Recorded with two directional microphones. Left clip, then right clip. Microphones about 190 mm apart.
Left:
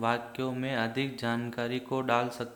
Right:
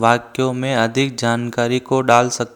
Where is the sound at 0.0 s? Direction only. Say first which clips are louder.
Right 15 dB; 45° right (ahead or behind).